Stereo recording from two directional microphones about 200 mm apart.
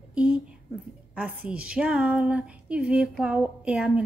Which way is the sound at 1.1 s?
5° right (ahead or behind).